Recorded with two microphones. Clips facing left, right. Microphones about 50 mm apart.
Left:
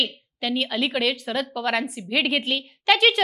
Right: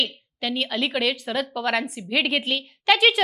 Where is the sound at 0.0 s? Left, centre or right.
Centre.